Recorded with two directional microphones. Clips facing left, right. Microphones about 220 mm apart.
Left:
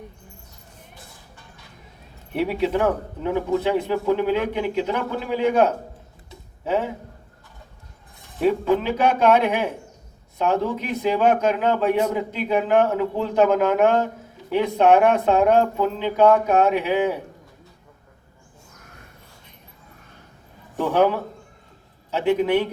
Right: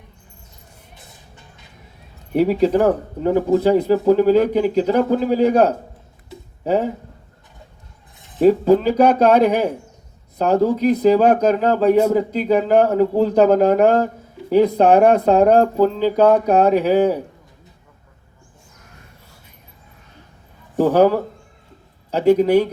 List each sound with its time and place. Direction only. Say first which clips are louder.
2.3 s speech: right 7 dB; 40° right (ahead or behind)
8.4 s speech: right 7 dB; 35° right (ahead or behind)
20.7 s speech: right 6 dB; 35° right (ahead or behind)